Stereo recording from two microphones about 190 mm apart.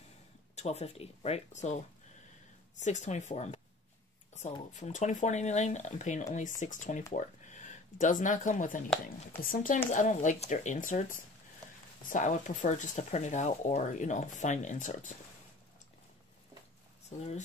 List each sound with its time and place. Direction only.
0.6 s speech: 35° left (ahead or behind)
2.8 s speech: 40° left (ahead or behind)
4.7 s speech: 40° left (ahead or behind)